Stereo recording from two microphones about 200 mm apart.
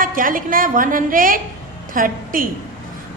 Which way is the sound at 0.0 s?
45° right (ahead or behind).